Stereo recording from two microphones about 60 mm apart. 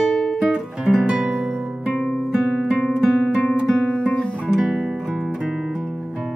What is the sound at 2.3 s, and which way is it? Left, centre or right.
Guitar, centre.